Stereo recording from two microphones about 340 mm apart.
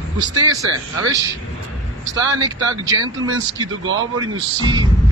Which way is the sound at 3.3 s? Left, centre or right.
Right.